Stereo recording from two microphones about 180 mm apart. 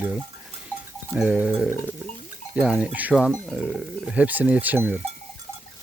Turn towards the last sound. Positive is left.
turn(degrees=-10)  # may be behind; listen again after turning